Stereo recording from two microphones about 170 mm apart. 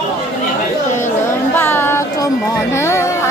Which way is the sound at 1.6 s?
10° left (ahead or behind).